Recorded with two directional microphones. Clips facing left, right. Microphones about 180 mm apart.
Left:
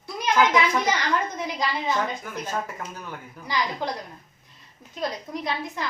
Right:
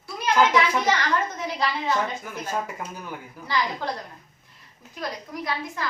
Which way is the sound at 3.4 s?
15° left (ahead or behind).